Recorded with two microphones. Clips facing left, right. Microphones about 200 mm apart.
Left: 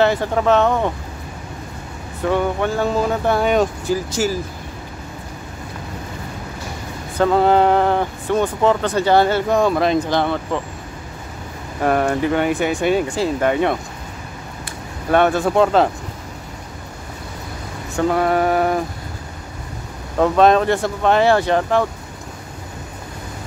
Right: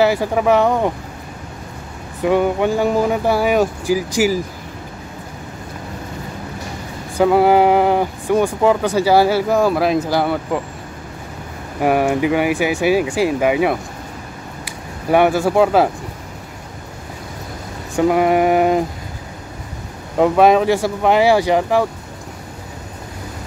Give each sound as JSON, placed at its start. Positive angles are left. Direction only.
{"t": 0.0, "sound": "speech", "side_deg": -10}
{"t": 2.2, "sound": "speech", "side_deg": -15}
{"t": 7.2, "sound": "speech", "side_deg": -10}
{"t": 11.8, "sound": "speech", "side_deg": -10}
{"t": 15.0, "sound": "speech", "side_deg": -10}
{"t": 17.9, "sound": "a sound", "side_deg": -15}
{"t": 20.2, "sound": "speech", "side_deg": -10}